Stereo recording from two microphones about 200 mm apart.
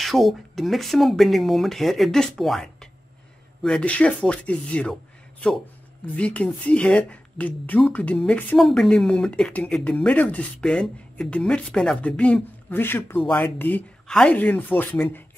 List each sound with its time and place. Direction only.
0.0 s speech: centre (ahead or behind)